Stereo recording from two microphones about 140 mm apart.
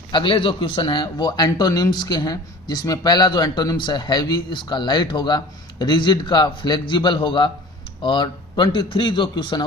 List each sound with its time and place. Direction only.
0.1 s a man's voice: 35° left (ahead or behind)